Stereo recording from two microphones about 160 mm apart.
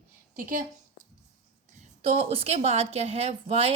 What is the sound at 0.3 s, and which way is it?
Speech, 60° right (ahead or behind).